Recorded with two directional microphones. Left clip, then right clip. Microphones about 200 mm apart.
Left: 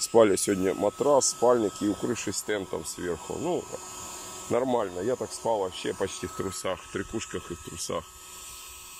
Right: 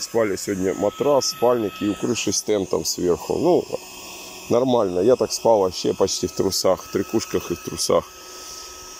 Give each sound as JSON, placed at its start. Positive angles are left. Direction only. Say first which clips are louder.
{"t": 0.1, "sound": "speech", "louder": "left 1 dB", "side_deg": 0}
{"t": 0.7, "sound": "speech", "louder": "right 5 dB", "side_deg": -15}
{"t": 4.5, "sound": "speech", "louder": "right 8 dB", "side_deg": -20}
{"t": 7.3, "sound": "speech", "louder": "right 12 dB", "side_deg": -40}